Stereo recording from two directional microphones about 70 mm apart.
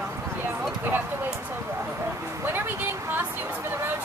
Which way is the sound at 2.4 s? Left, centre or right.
Right.